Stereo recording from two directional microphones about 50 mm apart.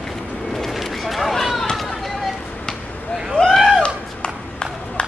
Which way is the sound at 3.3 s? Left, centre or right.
Centre.